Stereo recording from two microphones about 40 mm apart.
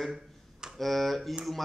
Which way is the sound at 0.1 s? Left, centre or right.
Centre.